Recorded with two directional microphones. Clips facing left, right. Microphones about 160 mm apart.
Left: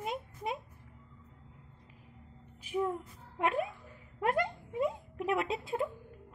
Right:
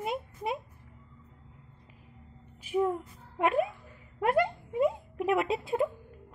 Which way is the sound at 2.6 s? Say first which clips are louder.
Right 5 dB; 65° right (ahead or behind).